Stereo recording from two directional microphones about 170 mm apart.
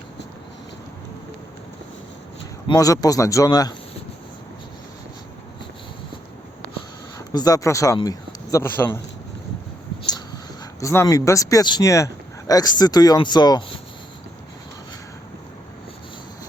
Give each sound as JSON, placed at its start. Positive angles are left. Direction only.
{"t": 2.6, "sound": "speech", "side_deg": 20}
{"t": 7.3, "sound": "speech", "side_deg": 20}
{"t": 10.0, "sound": "speech", "side_deg": 25}